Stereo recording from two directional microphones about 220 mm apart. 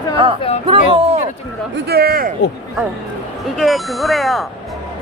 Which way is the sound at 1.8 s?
45° right (ahead or behind).